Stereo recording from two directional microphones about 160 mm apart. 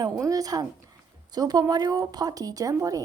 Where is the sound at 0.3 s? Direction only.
25° right (ahead or behind).